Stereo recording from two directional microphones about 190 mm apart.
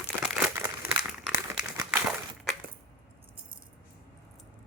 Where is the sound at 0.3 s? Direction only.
5° right (ahead or behind).